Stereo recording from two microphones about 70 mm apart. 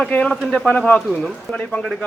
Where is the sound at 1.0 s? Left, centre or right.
Centre.